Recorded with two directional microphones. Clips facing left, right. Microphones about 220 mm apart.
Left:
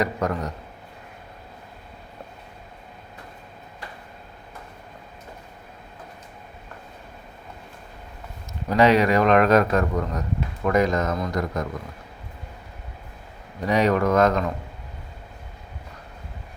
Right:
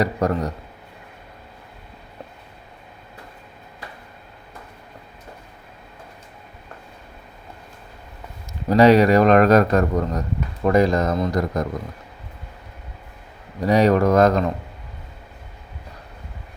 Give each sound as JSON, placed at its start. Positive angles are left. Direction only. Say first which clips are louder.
{"t": 0.0, "sound": "speech", "louder": "right 4 dB", "side_deg": -35}
{"t": 8.7, "sound": "speech", "louder": "right 5 dB", "side_deg": -35}
{"t": 13.6, "sound": "speech", "louder": "right 4 dB", "side_deg": -35}